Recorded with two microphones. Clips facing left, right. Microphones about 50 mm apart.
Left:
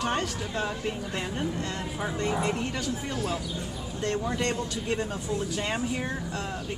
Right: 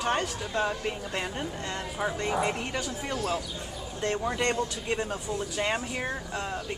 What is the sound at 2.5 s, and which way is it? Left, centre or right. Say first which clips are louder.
A woman's voice: left 2 dB; right.